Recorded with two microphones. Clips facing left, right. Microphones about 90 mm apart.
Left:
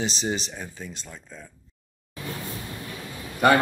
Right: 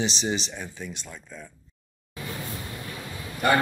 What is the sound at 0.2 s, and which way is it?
Speech, 45° left (ahead or behind).